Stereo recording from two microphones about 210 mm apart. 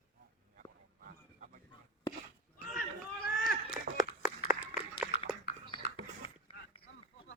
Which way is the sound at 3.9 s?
5° right (ahead or behind).